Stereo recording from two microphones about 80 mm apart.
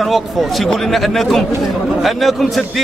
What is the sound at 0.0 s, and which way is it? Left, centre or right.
A man's voice, centre.